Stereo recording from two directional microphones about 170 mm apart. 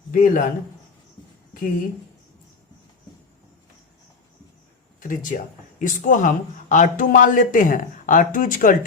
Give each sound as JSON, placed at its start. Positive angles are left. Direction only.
{"t": 0.1, "sound": "speech", "side_deg": 50}
{"t": 4.9, "sound": "speech", "side_deg": 50}